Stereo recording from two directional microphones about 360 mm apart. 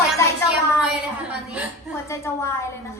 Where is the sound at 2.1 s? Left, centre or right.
Centre.